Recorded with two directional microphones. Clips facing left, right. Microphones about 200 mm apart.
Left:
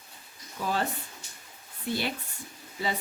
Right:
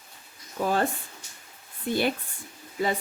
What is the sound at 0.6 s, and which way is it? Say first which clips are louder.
Speech: right 5 dB; 50° right (ahead or behind).